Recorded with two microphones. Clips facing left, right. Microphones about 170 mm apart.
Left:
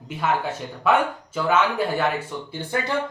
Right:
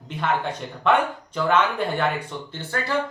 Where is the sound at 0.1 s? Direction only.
5° left (ahead or behind).